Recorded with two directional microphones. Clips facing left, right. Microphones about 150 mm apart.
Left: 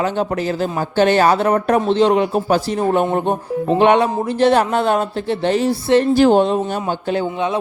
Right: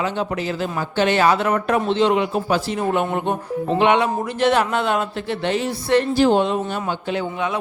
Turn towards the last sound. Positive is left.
turn(degrees=40)  # may be behind; listen again after turning